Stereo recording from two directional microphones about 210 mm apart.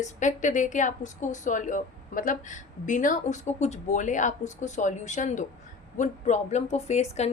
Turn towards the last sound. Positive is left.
turn(degrees=30)  # may be behind; listen again after turning